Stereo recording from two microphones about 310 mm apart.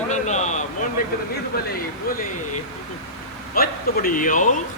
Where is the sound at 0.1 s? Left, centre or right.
Left.